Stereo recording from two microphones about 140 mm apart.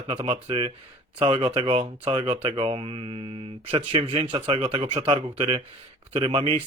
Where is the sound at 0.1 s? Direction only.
45° right (ahead or behind).